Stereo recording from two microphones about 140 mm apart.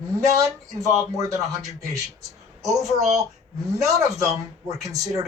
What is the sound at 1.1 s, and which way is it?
Speech, 25° right (ahead or behind).